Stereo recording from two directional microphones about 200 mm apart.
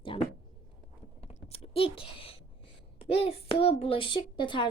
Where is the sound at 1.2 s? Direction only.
35° left (ahead or behind).